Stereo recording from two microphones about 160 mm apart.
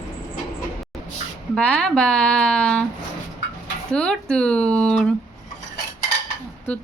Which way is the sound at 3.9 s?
5° left (ahead or behind).